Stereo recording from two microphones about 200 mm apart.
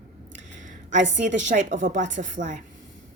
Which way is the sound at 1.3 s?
40° right (ahead or behind).